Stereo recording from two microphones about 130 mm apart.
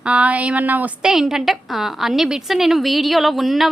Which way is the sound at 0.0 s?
10° right (ahead or behind).